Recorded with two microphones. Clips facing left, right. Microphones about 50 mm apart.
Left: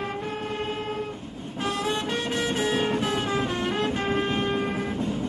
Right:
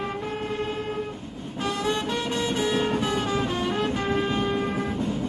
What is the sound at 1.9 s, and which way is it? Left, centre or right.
Music, centre.